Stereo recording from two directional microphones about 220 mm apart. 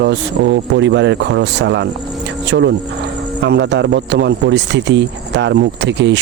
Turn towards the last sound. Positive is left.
turn(degrees=-55)  # may be behind; listen again after turning